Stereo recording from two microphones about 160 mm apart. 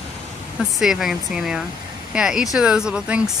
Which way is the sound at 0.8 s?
Centre (ahead or behind).